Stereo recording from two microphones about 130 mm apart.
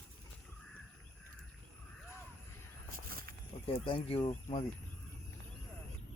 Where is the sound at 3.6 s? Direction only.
40° left (ahead or behind).